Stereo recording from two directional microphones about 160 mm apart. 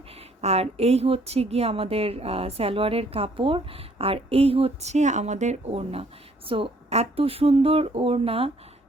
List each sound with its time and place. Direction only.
0.2 s a woman's voice: 40° right (ahead or behind)